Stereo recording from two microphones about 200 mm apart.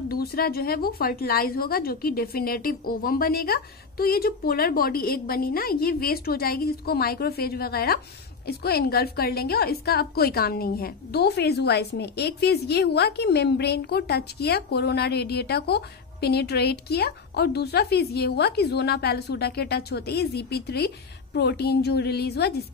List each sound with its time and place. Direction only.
0.1 s a woman's voice: 50° left (ahead or behind)